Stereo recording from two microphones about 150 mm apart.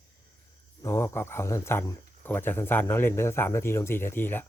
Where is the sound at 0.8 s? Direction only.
15° left (ahead or behind).